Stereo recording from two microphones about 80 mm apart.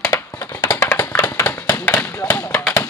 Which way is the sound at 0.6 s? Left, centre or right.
Left.